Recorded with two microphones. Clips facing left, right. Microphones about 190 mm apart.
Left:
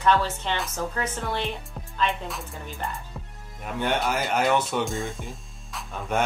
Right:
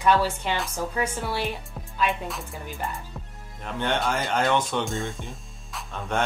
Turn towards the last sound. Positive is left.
turn(degrees=5)  # may be behind; listen again after turning